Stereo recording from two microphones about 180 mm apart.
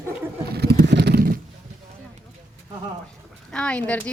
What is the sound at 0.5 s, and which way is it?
Vehicle, 60° right (ahead or behind).